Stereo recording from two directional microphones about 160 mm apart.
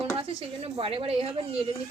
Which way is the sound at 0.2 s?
35° right (ahead or behind).